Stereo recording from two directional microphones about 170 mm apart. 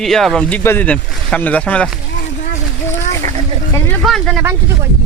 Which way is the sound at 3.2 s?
50° right (ahead or behind).